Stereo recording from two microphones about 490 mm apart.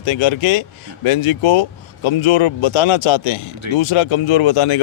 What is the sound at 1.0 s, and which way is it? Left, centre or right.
Speech, left.